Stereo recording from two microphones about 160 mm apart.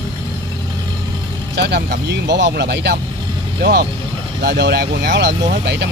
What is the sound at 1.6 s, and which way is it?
Speech, 90° right.